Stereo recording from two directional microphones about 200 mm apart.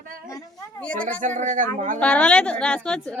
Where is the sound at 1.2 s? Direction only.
40° right (ahead or behind).